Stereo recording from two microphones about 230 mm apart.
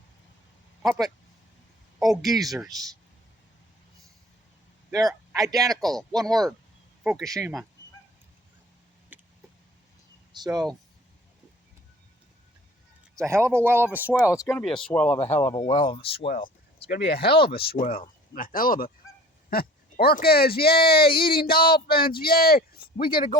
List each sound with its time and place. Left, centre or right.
0.8 s speech: centre
2.2 s speech: centre
2.5 s speech: centre
4.9 s speech: centre
5.7 s speech: centre
7.3 s speech: centre
9.1 s a sound: centre
10.3 s speech: centre
13.1 s speech: centre
14.5 s speech: centre; by 16.1 s left
16.2 s speech: left
23.1 s speech: centre